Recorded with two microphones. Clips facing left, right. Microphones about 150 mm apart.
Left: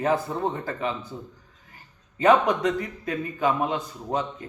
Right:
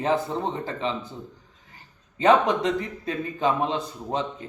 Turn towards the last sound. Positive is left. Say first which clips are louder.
# even
turn(degrees=-25)  # may be behind; listen again after turning